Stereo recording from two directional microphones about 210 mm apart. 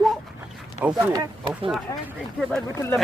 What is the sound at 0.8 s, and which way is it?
Speech, 10° right (ahead or behind).